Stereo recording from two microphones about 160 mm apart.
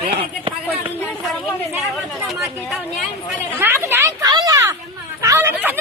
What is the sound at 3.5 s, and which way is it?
Speech, 15° right (ahead or behind).